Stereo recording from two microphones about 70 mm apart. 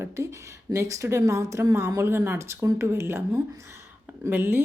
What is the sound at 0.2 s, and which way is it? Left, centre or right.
Speech, right.